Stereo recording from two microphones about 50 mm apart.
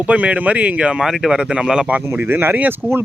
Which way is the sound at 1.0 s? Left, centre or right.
Centre.